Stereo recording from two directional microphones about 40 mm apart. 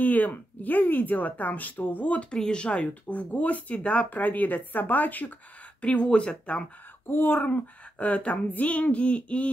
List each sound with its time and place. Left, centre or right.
0.0 s speech: left
2.3 s speech: left
5.8 s speech: left
7.1 s speech: left